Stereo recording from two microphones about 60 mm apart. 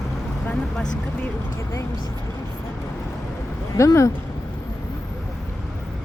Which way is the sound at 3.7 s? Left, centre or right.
Left.